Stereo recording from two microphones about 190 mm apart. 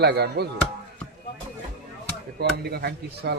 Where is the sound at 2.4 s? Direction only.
60° right (ahead or behind).